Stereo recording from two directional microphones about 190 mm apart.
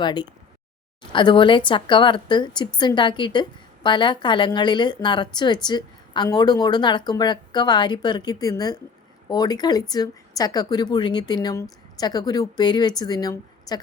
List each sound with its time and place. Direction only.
0.0 s a woman's voice: 20° left (ahead or behind)